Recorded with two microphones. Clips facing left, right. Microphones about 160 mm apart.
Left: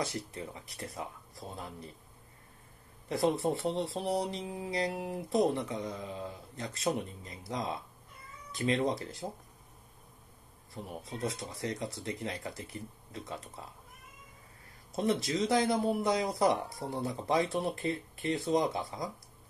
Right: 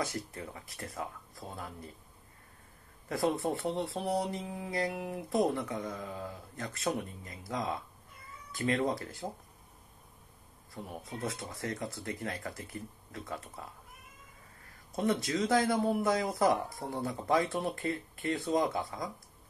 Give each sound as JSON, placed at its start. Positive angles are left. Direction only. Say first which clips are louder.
{"t": 0.0, "sound": "speech", "louder": "even", "side_deg": 25}
{"t": 3.1, "sound": "speech", "louder": "left 2 dB", "side_deg": 25}
{"t": 11.2, "sound": "speech", "louder": "left 2 dB", "side_deg": 20}
{"t": 15.0, "sound": "speech", "louder": "even", "side_deg": 25}